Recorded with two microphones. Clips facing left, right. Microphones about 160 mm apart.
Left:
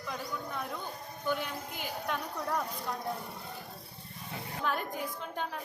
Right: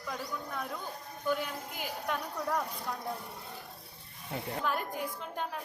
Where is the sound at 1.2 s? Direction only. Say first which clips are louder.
Right 1 dB; 5° right (ahead or behind).